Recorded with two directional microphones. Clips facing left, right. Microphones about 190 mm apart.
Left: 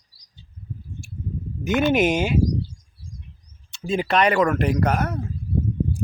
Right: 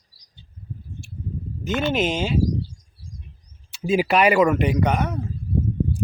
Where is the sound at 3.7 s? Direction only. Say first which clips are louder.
Right 3 dB; 5° right (ahead or behind).